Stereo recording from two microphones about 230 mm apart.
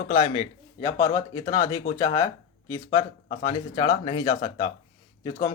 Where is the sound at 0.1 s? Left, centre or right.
Left.